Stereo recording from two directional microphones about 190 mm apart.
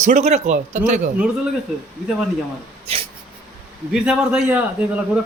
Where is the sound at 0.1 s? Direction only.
35° right (ahead or behind).